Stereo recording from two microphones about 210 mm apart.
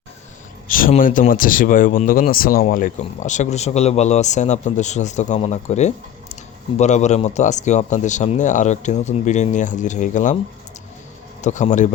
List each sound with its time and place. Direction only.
0.7 s speech: 40° left (ahead or behind)
11.3 s a man's voice: 35° left (ahead or behind)